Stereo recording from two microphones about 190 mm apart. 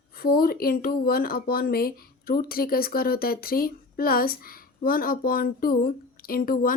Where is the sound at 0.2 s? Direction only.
50° left (ahead or behind).